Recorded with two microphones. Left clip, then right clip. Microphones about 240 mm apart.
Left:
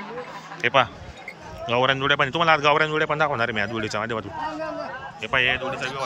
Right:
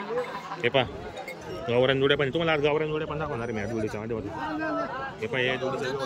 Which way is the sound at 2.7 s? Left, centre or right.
Left.